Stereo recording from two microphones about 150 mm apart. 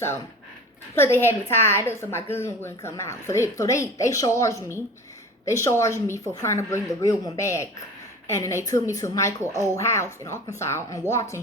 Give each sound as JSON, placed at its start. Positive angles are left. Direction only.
{"t": 0.9, "sound": "a woman's voice", "side_deg": 15}